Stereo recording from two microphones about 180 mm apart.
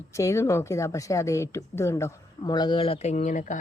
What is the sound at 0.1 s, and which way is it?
A woman's voice, 15° left (ahead or behind).